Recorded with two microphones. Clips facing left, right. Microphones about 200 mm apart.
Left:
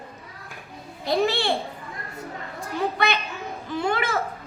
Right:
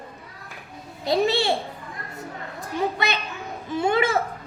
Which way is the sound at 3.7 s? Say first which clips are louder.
Right 3 dB; 20° right (ahead or behind).